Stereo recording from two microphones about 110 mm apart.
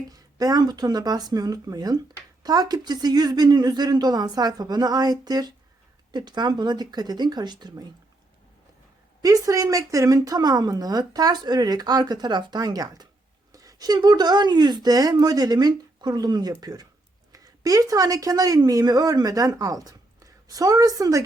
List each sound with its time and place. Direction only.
0.1 s a woman's voice: 35° right (ahead or behind)
9.2 s a woman's voice: 30° right (ahead or behind)